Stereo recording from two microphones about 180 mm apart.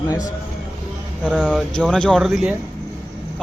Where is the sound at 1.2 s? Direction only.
5° left (ahead or behind).